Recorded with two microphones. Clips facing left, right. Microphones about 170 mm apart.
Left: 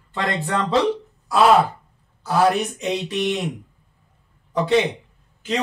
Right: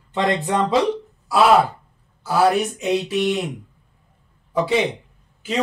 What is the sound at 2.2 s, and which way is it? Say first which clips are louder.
A man's voice: right 1 dB; 5° right (ahead or behind).